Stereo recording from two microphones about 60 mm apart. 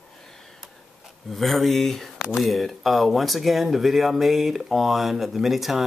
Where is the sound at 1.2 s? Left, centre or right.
Centre.